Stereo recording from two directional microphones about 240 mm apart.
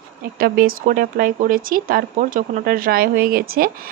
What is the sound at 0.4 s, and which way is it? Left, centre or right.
Speech, right.